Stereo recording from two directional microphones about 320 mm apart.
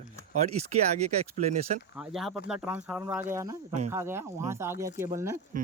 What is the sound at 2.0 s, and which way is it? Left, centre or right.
Speech, centre.